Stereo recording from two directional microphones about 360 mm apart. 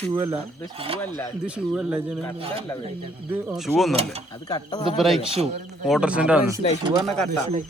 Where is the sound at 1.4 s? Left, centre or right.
Centre.